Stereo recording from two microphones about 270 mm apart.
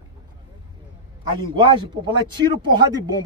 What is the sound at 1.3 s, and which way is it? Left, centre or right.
Speech, centre.